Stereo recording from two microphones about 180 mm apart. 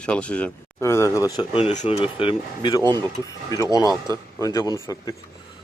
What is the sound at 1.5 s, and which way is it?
Speech, 35° left (ahead or behind).